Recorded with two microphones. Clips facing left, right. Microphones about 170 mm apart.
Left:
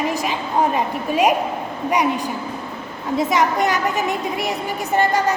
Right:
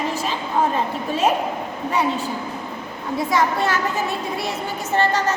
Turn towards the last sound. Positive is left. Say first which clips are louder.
# left 2 dB
turn(degrees=15)  # may be behind; listen again after turning